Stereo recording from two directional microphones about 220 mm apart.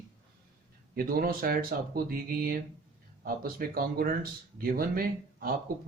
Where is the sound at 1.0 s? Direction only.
40° right (ahead or behind).